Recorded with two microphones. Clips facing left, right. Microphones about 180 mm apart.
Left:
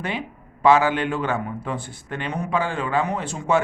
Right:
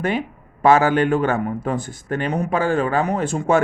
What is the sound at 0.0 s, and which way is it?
A man's voice, 45° right (ahead or behind).